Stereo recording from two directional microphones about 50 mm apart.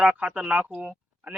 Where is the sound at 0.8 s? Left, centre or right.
Right.